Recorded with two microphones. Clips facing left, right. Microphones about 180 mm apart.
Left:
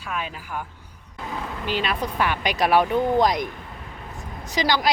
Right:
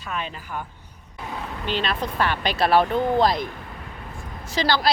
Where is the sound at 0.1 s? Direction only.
5° left (ahead or behind).